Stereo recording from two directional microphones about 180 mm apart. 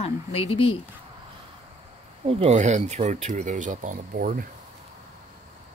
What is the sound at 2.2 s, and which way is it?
Speech, 35° right (ahead or behind).